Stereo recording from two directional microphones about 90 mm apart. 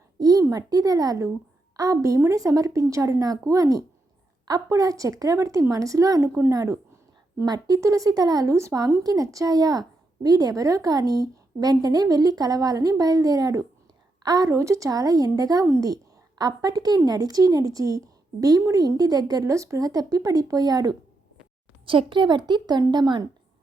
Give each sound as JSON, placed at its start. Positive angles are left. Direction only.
{"t": 0.2, "sound": "a sound", "side_deg": -45}
{"t": 0.5, "sound": "a woman's voice", "side_deg": -45}
{"t": 21.8, "sound": "a woman's voice", "side_deg": -70}